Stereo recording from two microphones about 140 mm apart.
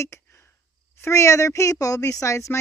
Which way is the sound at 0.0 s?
20° left (ahead or behind).